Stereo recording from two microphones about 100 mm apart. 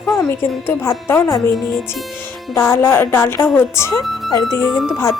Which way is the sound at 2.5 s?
25° left (ahead or behind).